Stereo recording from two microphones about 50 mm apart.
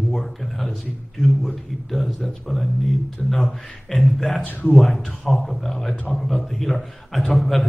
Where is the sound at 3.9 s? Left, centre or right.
Centre.